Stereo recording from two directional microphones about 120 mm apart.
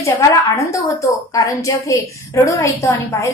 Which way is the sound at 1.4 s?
25° left (ahead or behind).